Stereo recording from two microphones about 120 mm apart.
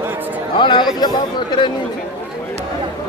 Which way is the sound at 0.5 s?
40° left (ahead or behind).